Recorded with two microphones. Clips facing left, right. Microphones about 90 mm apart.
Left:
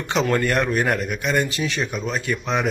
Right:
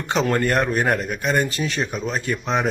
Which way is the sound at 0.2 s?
35° right (ahead or behind).